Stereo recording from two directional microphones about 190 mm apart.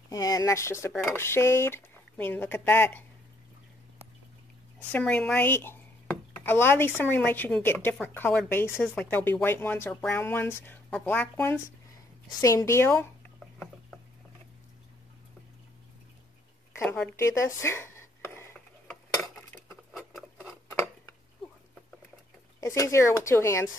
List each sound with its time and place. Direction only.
0.1 s a woman's voice: 20° left (ahead or behind)
4.9 s a woman's voice: 5° left (ahead or behind)
13.4 s a sound: centre (ahead or behind)
16.8 s speech: 5° left (ahead or behind)
17.2 s a sound: 15° left (ahead or behind)
19.9 s patter: centre (ahead or behind)
22.6 s a woman's voice: 15° left (ahead or behind)